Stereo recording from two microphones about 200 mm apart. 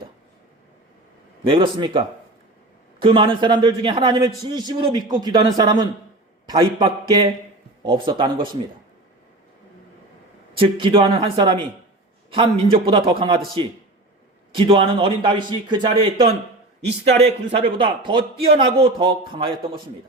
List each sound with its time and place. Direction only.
1.5 s a man's voice: 25° right (ahead or behind)
10.6 s a man's voice: 25° right (ahead or behind)
14.5 s a man's voice: 25° right (ahead or behind)